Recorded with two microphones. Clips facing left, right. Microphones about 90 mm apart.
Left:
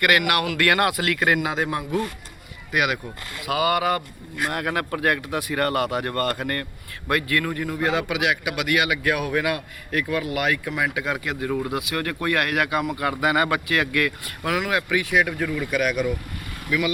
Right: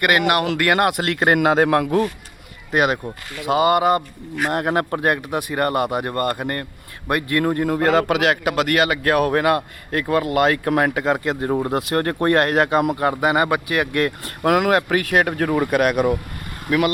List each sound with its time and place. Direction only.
0.2 s speech: 30° right (ahead or behind)
1.3 s a man's voice: 55° right (ahead or behind)
2.7 s a man's voice: 35° right (ahead or behind); by 11.0 s 50° right (ahead or behind)
11.0 s speech: 35° right (ahead or behind)
14.4 s a man's voice: 50° right (ahead or behind)